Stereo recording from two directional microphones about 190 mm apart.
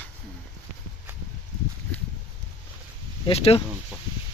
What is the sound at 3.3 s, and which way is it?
Speech, 30° left (ahead or behind).